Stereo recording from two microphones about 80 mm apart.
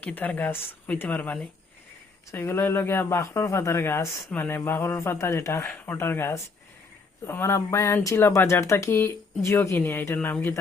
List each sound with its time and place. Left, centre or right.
0.0 s speech: centre